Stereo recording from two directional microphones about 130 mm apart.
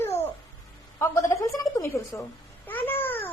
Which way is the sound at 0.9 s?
20° left (ahead or behind).